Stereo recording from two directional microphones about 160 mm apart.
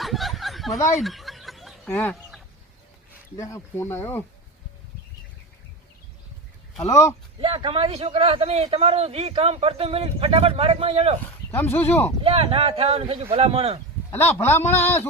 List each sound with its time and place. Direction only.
0.0 s a sound: centre (ahead or behind)
0.9 s snicker: centre (ahead or behind)
1.9 s speech: 10° left (ahead or behind)
3.3 s speech: 20° left (ahead or behind)
7.4 s a man's voice: 35° right (ahead or behind)
11.5 s speech: 10° left (ahead or behind)
12.2 s a man's voice: 35° right (ahead or behind)
14.3 s speech: 15° left (ahead or behind)